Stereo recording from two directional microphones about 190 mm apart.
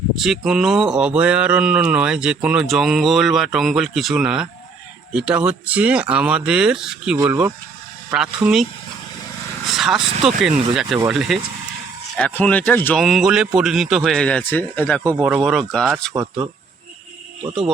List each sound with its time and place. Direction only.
0.2 s speech: centre (ahead or behind)
9.6 s vehicle: centre (ahead or behind)
10.2 s speech: centre (ahead or behind)
15.1 s speech: 10° right (ahead or behind)
16.1 s speech: 20° right (ahead or behind)